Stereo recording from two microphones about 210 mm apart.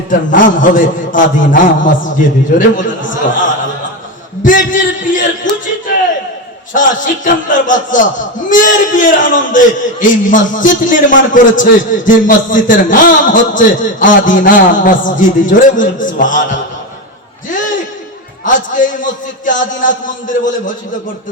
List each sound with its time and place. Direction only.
0.1 s a man's voice: 40° left (ahead or behind)
5.5 s a sound: 60° left (ahead or behind)
6.7 s a man's voice: 40° left (ahead or behind)
18.4 s a man's voice: 40° left (ahead or behind)